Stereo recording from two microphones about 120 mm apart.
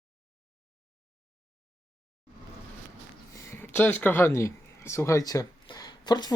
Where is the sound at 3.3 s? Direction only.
20° left (ahead or behind).